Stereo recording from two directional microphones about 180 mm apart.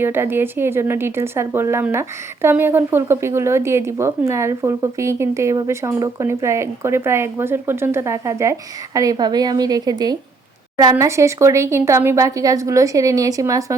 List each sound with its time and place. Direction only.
0.0 s a woman's voice: 10° right (ahead or behind)